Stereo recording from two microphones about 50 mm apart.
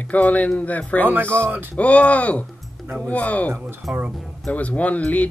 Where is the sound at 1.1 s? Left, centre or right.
Right.